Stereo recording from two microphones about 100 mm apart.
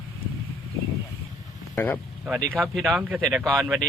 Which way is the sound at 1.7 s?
20° left (ahead or behind).